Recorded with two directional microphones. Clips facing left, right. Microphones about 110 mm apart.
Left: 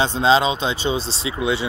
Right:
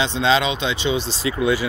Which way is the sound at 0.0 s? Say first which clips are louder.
Left 2 dB; 35° left (ahead or behind).